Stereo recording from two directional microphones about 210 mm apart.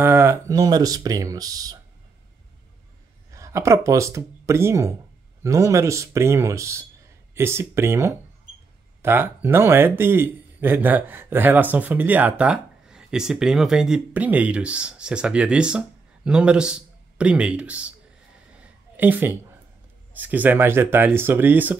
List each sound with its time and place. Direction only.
0.0 s speech: 10° right (ahead or behind)
3.3 s a man's voice: 15° right (ahead or behind)
18.6 s a sound: 10° right (ahead or behind)
20.2 s speech: 10° right (ahead or behind)